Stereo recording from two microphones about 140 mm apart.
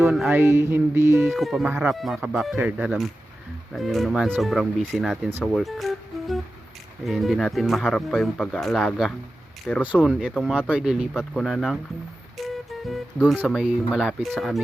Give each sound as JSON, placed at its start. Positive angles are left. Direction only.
{"t": 0.3, "sound": "music", "side_deg": -15}
{"t": 1.2, "sound": "speech", "side_deg": 0}
{"t": 10.0, "sound": "speech", "side_deg": -5}
{"t": 10.3, "sound": "speech", "side_deg": 5}
{"t": 10.7, "sound": "speech", "side_deg": -5}
{"t": 12.5, "sound": "music", "side_deg": 0}
{"t": 13.3, "sound": "speech", "side_deg": 10}
{"t": 13.6, "sound": "speech", "side_deg": -5}